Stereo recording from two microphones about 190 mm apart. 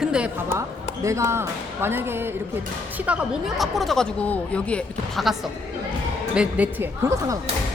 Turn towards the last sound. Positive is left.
turn(degrees=-15)  # may be behind; listen again after turning